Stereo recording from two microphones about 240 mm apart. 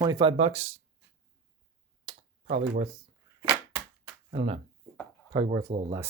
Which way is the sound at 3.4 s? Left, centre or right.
Centre.